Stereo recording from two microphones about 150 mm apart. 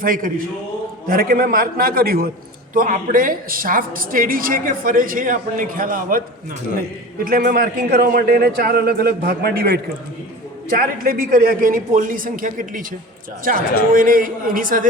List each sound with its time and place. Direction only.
0.0 s a woman's voice: 70° right (ahead or behind); by 2.3 s 85° right
2.7 s a woman's voice: 70° right (ahead or behind)
7.3 s a man's voice: 75° right (ahead or behind); by 9.8 s 90° right
10.8 s a woman's voice: 70° right (ahead or behind)